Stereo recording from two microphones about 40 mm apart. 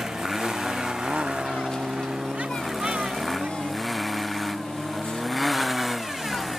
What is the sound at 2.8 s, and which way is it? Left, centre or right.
Vehicle, centre.